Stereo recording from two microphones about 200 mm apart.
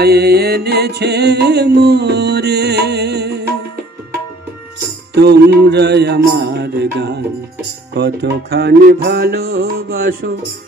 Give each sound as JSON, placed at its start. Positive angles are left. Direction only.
{"t": 0.0, "sound": "music", "side_deg": -55}
{"t": 5.1, "sound": "music", "side_deg": -55}
{"t": 9.8, "sound": "speech", "side_deg": -50}